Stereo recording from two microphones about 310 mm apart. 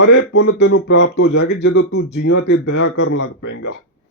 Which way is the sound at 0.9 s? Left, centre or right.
Left.